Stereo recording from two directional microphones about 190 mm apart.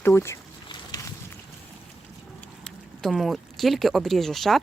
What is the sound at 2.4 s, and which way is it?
Speech, centre (ahead or behind).